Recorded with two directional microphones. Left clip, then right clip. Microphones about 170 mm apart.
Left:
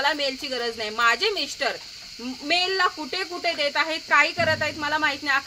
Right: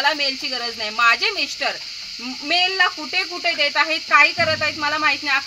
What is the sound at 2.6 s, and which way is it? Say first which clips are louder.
Speech: right 4 dB; 45° left (ahead or behind).